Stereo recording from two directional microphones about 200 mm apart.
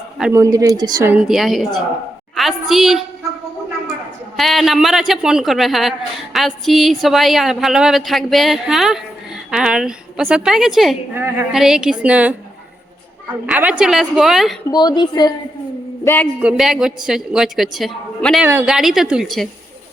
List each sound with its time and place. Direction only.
0.2 s a woman's voice: 10° right (ahead or behind)
4.4 s a woman's voice: centre (ahead or behind)
13.5 s a woman's voice: 5° right (ahead or behind)
14.7 s a woman's voice: 20° left (ahead or behind)
16.0 s a man's voice: 10° left (ahead or behind)
16.4 s a woman's voice: 5° right (ahead or behind)